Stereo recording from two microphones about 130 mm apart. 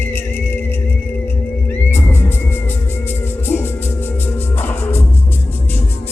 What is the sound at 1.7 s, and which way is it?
Music, 15° left (ahead or behind).